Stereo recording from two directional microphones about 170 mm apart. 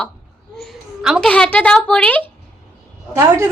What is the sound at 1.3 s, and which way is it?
Speech, 5° left (ahead or behind).